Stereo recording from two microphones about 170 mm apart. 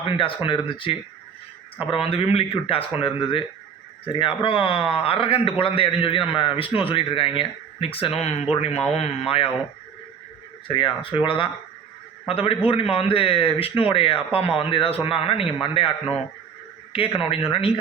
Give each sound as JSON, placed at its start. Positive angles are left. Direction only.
{"t": 0.0, "sound": "speech", "side_deg": 30}
{"t": 10.7, "sound": "a man's voice", "side_deg": 30}